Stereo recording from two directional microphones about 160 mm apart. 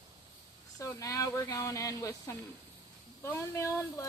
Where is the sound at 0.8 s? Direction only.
20° left (ahead or behind).